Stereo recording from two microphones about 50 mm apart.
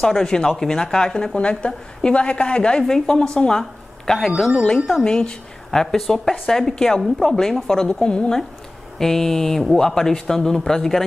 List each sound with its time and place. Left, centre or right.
0.0 s a woman's voice: centre